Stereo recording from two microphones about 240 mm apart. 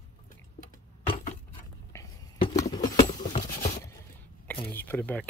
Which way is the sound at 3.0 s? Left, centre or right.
Left.